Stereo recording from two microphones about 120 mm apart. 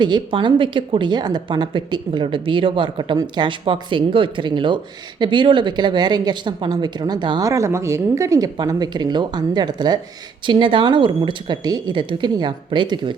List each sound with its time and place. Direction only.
0.0 s a woman's voice: 40° right (ahead or behind)